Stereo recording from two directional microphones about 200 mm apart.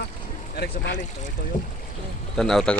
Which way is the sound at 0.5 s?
55° left (ahead or behind).